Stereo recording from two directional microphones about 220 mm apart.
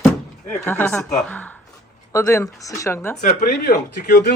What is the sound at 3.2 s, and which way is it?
Speech, 45° left (ahead or behind).